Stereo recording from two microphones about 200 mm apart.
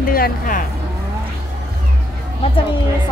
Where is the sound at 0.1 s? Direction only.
45° left (ahead or behind).